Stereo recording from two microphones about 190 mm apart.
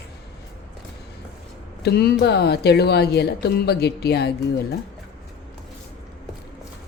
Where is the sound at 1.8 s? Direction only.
55° left (ahead or behind).